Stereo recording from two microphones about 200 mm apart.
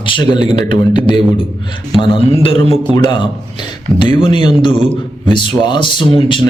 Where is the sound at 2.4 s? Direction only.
25° left (ahead or behind).